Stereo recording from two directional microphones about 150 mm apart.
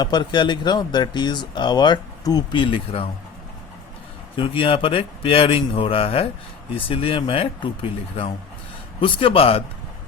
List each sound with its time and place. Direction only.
0.0 s speech: 30° left (ahead or behind)
4.4 s a man's voice: 35° left (ahead or behind)